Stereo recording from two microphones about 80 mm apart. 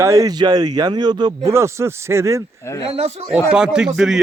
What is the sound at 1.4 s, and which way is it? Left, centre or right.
Speech, right.